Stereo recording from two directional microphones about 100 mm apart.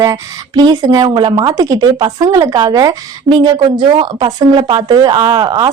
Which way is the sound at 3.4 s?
60° right (ahead or behind).